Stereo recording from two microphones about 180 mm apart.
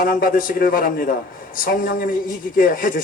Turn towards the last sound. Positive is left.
turn(degrees=50)  # may be behind; listen again after turning